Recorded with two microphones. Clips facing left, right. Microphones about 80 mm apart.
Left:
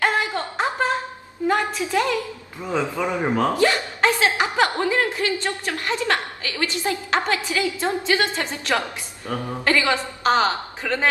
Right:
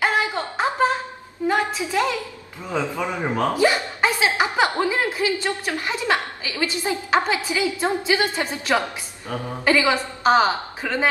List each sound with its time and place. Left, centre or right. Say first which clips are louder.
0.0 s a sound: even; centre
1.5 s a woman's voice: left 1 dB; centre
2.6 s a man's voice: left 1 dB; centre
3.5 s a woman's voice: right 1 dB; centre